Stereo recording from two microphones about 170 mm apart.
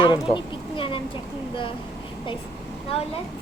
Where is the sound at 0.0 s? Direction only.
30° left (ahead or behind).